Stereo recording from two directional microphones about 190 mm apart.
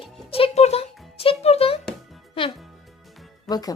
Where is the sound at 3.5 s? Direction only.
20° left (ahead or behind).